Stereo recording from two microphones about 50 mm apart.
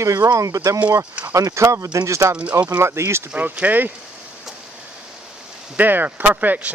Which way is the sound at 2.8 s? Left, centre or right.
Right.